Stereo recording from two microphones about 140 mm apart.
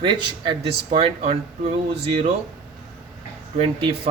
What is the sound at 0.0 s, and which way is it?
A man's voice, 35° right (ahead or behind).